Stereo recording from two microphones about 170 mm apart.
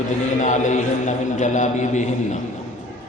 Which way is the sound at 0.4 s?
45° left (ahead or behind).